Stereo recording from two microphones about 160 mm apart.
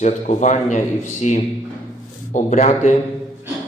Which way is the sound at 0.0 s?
45° left (ahead or behind).